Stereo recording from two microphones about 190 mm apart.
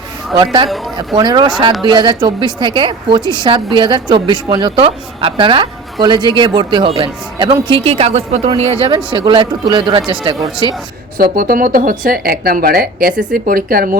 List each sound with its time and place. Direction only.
0.3 s a woman's voice: 25° right (ahead or behind)
11.2 s speech: 50° right (ahead or behind)